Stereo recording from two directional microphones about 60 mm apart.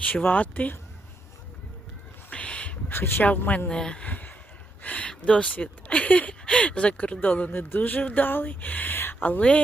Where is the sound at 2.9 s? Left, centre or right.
Left.